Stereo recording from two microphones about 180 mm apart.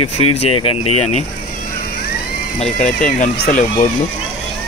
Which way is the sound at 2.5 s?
40° left (ahead or behind).